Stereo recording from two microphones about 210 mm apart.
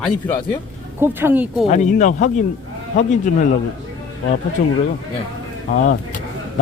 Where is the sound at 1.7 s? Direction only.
35° left (ahead or behind).